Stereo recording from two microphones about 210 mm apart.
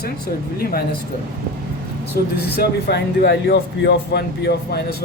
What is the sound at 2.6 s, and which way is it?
Speech, 55° left (ahead or behind).